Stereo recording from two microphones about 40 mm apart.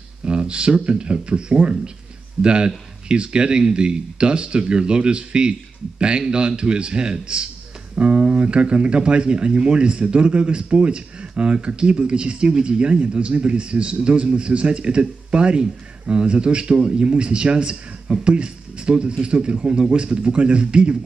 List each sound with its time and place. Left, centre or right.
0.2 s speech: right